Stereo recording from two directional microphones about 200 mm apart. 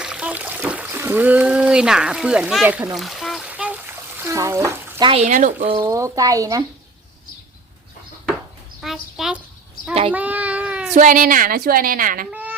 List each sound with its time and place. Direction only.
0.0 s a sound: 5° right (ahead or behind)
4.2 s speech: 15° right (ahead or behind)
5.2 s speech: 40° right (ahead or behind)
5.8 s speech: 15° right (ahead or behind)
8.8 s speech: centre (ahead or behind)
10.1 s child singing: 5° right (ahead or behind)
10.9 s a woman's voice: 40° right (ahead or behind)
12.3 s a sound: 10° right (ahead or behind)